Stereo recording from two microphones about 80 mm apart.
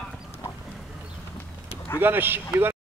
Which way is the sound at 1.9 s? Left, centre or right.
Right.